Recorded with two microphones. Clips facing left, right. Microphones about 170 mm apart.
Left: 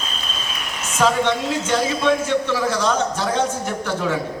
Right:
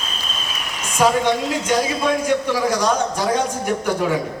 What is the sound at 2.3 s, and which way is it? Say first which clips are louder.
Speech: right 1 dB; 10° right (ahead or behind).